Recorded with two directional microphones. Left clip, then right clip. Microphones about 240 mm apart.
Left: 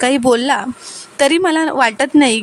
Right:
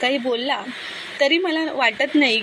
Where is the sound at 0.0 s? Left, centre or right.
Left.